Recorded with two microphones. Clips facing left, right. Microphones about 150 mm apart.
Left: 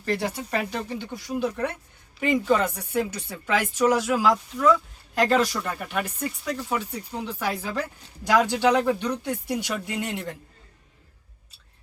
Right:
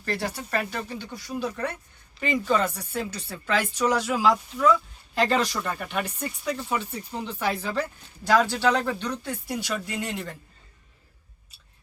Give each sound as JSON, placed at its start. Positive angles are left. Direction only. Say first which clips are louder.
{"t": 0.0, "sound": "speech", "louder": "left 3 dB", "side_deg": 15}